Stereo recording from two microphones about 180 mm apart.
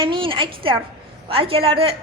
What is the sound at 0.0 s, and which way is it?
A woman's voice, 30° right (ahead or behind).